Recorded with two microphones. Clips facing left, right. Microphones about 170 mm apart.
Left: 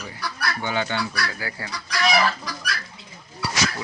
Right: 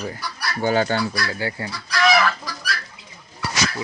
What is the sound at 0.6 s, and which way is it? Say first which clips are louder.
Speech: right 8 dB; 40° right (ahead or behind).